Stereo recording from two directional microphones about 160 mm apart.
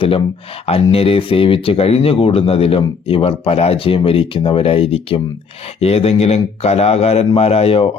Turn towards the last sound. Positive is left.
turn(degrees=40)  # may be behind; listen again after turning